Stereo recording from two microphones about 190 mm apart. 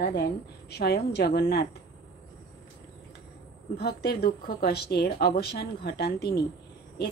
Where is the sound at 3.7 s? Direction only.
55° left (ahead or behind).